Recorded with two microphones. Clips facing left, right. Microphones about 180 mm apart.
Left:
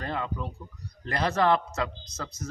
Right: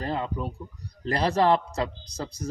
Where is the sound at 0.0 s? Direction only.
30° right (ahead or behind).